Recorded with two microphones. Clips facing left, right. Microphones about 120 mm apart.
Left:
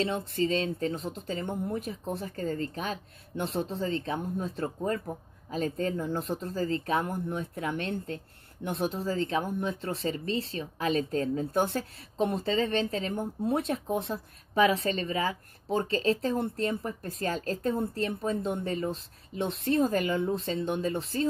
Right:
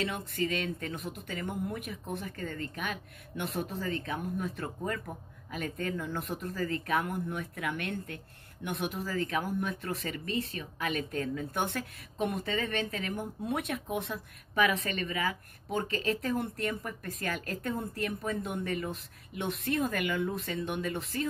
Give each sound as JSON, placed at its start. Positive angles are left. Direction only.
{"t": 0.0, "sound": "speech", "side_deg": 30}